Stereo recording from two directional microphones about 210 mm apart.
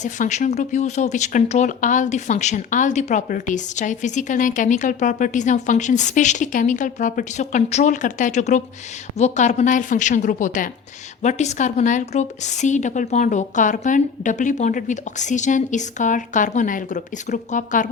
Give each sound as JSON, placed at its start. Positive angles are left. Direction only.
{"t": 0.0, "sound": "speech", "side_deg": 35}